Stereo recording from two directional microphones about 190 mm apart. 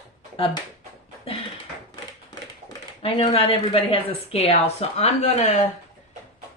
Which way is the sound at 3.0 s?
30° left (ahead or behind).